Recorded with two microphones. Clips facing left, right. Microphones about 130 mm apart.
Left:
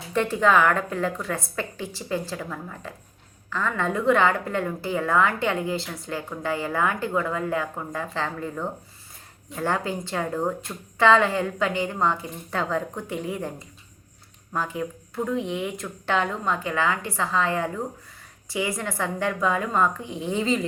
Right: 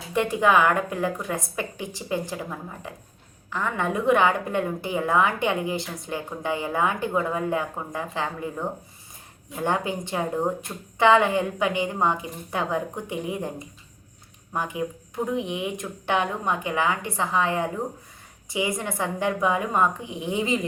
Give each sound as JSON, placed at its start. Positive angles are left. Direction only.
{"t": 0.1, "sound": "a woman's voice", "side_deg": -15}